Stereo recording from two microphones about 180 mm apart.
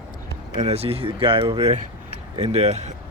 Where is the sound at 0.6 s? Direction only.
35° right (ahead or behind).